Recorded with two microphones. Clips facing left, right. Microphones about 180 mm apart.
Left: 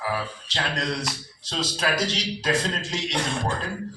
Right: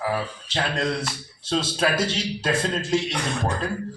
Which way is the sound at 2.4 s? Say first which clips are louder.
Right 1 dB; 55° right (ahead or behind).